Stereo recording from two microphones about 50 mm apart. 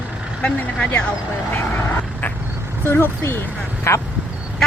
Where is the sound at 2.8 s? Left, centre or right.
Left.